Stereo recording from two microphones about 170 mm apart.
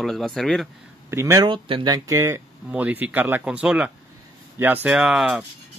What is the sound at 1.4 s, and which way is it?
Speech, 30° right (ahead or behind).